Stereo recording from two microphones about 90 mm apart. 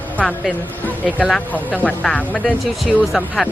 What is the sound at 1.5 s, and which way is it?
Speech, 15° left (ahead or behind).